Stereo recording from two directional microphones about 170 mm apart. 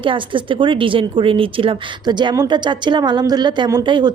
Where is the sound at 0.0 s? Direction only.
30° right (ahead or behind).